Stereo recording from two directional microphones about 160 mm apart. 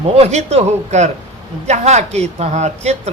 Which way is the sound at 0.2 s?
45° right (ahead or behind).